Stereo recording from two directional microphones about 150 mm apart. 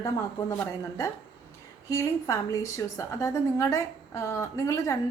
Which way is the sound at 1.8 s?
20° left (ahead or behind).